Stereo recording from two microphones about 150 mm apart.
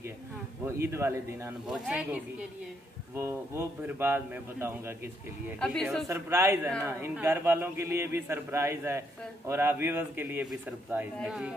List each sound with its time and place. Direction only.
0.7 s a man's voice: 20° right (ahead or behind)